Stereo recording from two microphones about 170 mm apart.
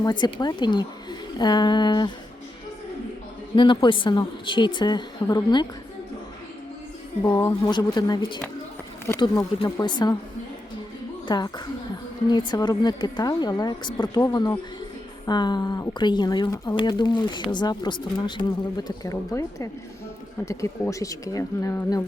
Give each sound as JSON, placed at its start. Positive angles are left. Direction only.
{"t": 0.0, "sound": "speech", "side_deg": 25}
{"t": 3.5, "sound": "speech", "side_deg": 30}
{"t": 7.3, "sound": "speech", "side_deg": 20}
{"t": 11.3, "sound": "speech", "side_deg": 25}